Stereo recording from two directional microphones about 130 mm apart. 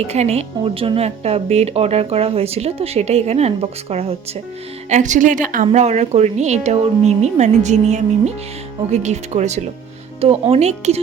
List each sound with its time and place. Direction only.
0.1 s speech: 55° right (ahead or behind)
4.9 s a woman's voice: 70° right (ahead or behind); by 5.6 s 90° right
5.7 s speech: 60° right (ahead or behind)
10.2 s speech: 50° right (ahead or behind)